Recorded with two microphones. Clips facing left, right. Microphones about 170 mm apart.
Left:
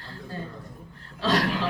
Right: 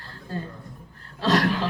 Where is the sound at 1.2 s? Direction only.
45° right (ahead or behind).